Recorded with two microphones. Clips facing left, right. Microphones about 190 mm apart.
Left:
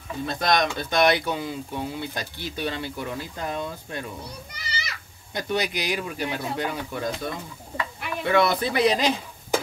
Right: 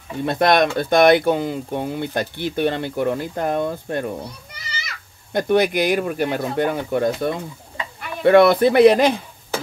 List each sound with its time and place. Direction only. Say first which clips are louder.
0.2 s speech: right 7 dB; 60° right (ahead or behind)
5.3 s speech: right 9 dB; 55° right (ahead or behind)